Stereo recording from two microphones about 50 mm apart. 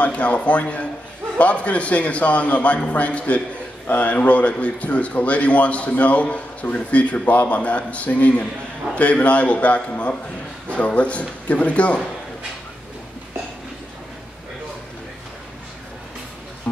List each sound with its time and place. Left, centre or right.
0.0 s a man's voice: left